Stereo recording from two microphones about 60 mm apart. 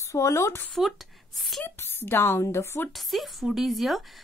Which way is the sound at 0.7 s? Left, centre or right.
Centre.